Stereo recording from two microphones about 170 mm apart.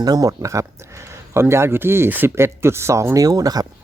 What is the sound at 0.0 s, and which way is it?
Speech, 20° right (ahead or behind).